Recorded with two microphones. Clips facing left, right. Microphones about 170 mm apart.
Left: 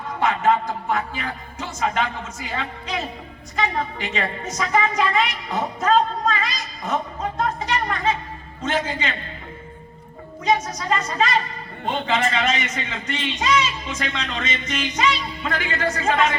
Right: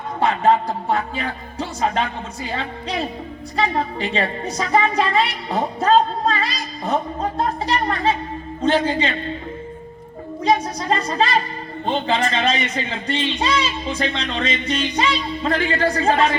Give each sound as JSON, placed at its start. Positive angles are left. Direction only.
{"t": 0.2, "sound": "a man's voice", "side_deg": -30}
{"t": 10.4, "sound": "a man's voice", "side_deg": -35}